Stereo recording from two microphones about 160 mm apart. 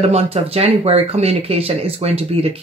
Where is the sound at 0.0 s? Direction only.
40° right (ahead or behind).